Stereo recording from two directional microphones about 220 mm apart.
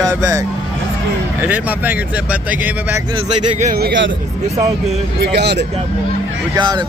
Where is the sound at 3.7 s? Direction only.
45° right (ahead or behind).